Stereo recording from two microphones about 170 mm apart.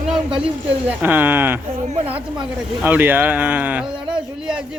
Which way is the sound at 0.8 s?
10° right (ahead or behind).